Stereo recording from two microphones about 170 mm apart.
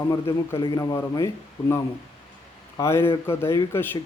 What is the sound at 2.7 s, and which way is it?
Speech, 15° left (ahead or behind).